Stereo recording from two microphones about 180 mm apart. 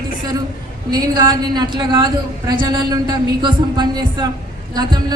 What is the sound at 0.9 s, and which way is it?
A woman's voice, 25° right (ahead or behind).